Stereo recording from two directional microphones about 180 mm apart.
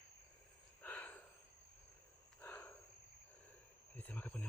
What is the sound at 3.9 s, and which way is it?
Cricket, 10° left (ahead or behind).